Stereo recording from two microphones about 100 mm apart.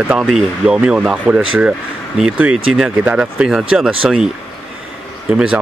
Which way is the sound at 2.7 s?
10° right (ahead or behind).